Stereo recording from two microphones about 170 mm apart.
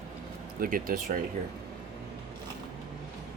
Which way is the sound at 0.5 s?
55° right (ahead or behind).